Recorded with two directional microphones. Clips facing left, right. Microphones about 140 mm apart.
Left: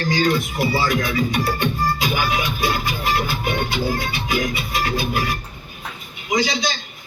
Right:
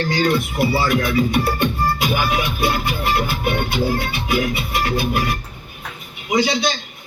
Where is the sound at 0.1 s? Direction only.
60° right (ahead or behind).